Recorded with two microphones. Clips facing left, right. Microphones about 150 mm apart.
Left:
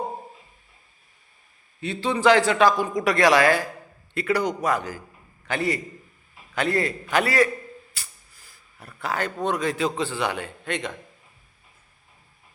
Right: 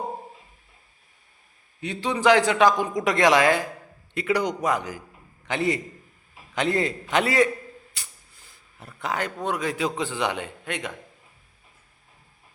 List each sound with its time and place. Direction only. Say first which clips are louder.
1.8 s a man's voice: left 2 dB; 15° right (ahead or behind)
7.9 s a sound: even; 20° right (ahead or behind)
9.0 s a man's voice: left 1 dB; 15° right (ahead or behind)